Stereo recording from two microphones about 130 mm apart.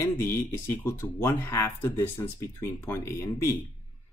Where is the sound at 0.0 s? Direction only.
20° left (ahead or behind).